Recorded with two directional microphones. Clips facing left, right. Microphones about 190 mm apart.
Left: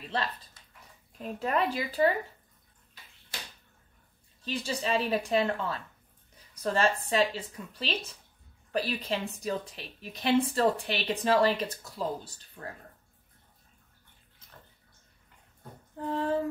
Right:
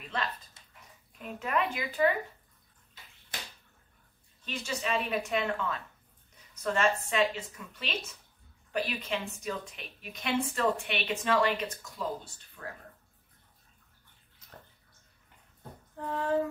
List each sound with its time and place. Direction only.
1.1 s a woman's voice: 35° left (ahead or behind)
4.5 s a woman's voice: 35° left (ahead or behind)
16.0 s a sound: 30° left (ahead or behind)